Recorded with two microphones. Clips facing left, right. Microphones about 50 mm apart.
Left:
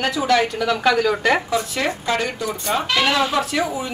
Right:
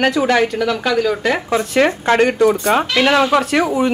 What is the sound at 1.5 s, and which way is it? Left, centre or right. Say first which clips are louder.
Speech: right 7 dB; right.